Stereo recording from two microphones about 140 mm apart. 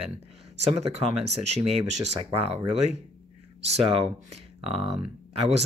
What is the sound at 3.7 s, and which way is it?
Speech, 50° right (ahead or behind).